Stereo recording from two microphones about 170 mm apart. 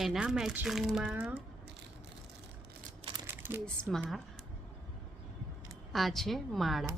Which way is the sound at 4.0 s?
Centre (ahead or behind).